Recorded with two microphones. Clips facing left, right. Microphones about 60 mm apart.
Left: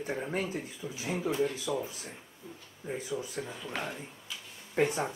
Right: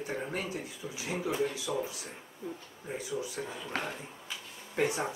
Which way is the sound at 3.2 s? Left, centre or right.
Centre.